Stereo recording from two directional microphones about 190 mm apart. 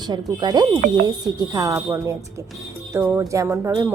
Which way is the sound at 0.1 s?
20° right (ahead or behind).